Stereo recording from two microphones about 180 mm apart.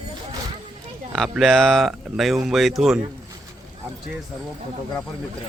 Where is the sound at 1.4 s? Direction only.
Centre (ahead or behind).